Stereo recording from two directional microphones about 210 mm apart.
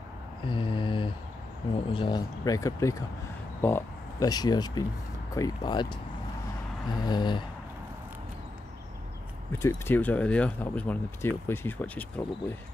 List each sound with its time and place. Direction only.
0.5 s mantra: 25° left (ahead or behind)
1.9 s speech: 25° left (ahead or behind)
9.5 s speech: 10° left (ahead or behind)